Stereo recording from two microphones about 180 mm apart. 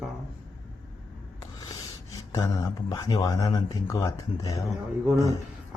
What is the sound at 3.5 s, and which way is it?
Speech, 15° left (ahead or behind).